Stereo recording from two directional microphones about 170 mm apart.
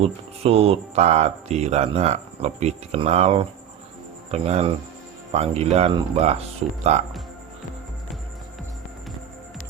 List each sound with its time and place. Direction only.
0.0 s speech: 35° right (ahead or behind)